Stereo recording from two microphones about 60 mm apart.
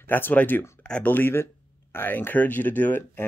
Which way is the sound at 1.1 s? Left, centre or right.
Left.